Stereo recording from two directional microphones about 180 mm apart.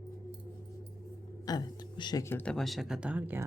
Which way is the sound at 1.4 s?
20° left (ahead or behind).